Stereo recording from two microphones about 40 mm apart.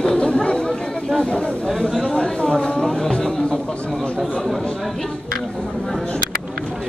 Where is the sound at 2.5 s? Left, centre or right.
Centre.